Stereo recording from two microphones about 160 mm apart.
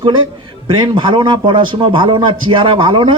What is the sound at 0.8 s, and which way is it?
A man's voice, 30° right (ahead or behind).